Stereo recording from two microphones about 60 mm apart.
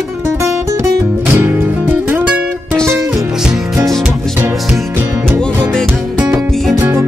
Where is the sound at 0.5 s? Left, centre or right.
Right.